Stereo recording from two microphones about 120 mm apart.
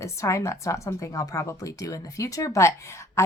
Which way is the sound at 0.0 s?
25° left (ahead or behind).